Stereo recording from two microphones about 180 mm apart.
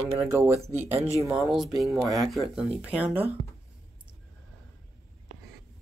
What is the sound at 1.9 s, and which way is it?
Speech, 20° right (ahead or behind).